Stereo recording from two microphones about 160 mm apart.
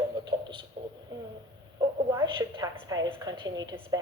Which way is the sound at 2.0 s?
25° right (ahead or behind).